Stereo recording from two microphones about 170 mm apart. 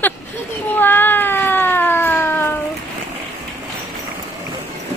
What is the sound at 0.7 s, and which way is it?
Cat, 10° left (ahead or behind).